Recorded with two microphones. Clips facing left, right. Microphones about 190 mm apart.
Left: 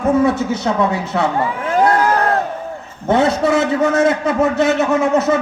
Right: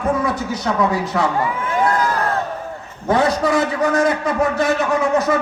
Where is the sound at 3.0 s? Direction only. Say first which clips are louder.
Left 2 dB; 25° left (ahead or behind).